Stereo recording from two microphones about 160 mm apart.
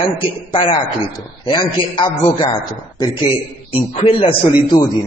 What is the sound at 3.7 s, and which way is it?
A man's voice, 35° left (ahead or behind).